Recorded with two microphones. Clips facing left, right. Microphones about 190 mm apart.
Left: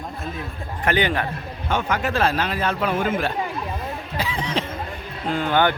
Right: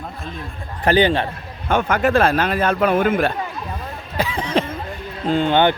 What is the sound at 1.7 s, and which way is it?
A man's voice, 55° right (ahead or behind).